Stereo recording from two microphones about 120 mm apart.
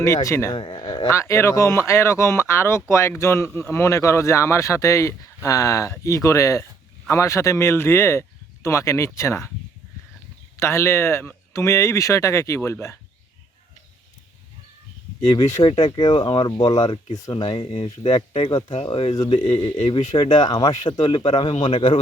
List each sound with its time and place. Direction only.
0.0 s speech: 25° left (ahead or behind)
0.5 s speech: 45° left (ahead or behind)
0.8 s speech: 30° left (ahead or behind)
10.6 s speech: 25° left (ahead or behind)
15.3 s speech: 35° left (ahead or behind); by 19.1 s 50° left (ahead or behind)
19.1 s speech: 35° left (ahead or behind)